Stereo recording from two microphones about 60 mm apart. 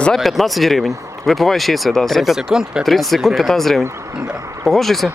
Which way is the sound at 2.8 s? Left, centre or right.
Centre.